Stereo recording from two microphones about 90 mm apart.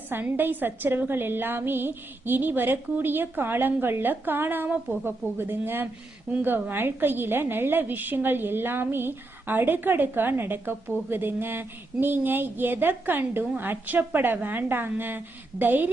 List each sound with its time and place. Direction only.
0.1 s a woman's voice: 20° right (ahead or behind)